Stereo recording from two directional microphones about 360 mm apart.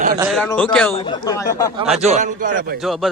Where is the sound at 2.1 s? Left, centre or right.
Centre.